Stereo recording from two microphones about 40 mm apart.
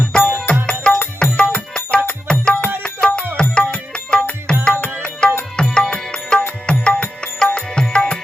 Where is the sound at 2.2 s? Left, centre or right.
Left.